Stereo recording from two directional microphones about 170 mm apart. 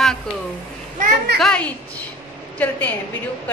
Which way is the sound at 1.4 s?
5° left (ahead or behind).